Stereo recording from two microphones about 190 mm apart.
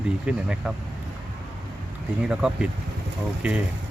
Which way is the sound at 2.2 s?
5° right (ahead or behind).